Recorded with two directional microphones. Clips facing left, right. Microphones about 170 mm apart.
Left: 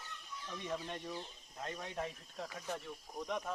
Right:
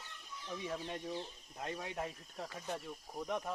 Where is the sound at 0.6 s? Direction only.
5° right (ahead or behind).